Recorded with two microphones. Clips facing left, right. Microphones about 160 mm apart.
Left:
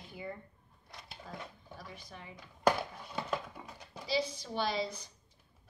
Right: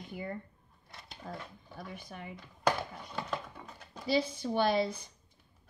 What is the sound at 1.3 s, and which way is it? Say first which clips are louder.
A woman's voice: right 3 dB; 55° right (ahead or behind).